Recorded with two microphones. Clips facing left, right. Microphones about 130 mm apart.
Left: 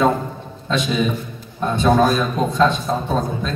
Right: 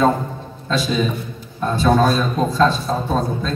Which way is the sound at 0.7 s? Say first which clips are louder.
Even; 20° left (ahead or behind).